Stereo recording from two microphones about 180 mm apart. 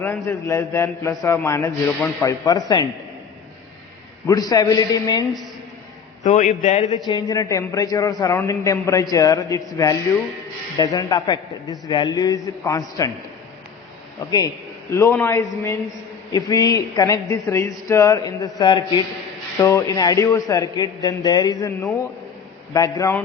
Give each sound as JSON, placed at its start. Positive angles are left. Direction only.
{"t": 0.3, "sound": "speech", "side_deg": 15}
{"t": 4.3, "sound": "a man's voice", "side_deg": 20}
{"t": 6.2, "sound": "a man's voice", "side_deg": 45}
{"t": 7.1, "sound": "a man's voice", "side_deg": 20}
{"t": 14.3, "sound": "a man's voice", "side_deg": 20}